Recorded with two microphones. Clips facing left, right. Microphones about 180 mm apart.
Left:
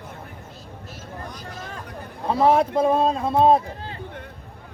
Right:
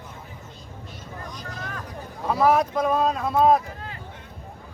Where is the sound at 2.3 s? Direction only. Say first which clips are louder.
Left 2 dB; 30° left (ahead or behind).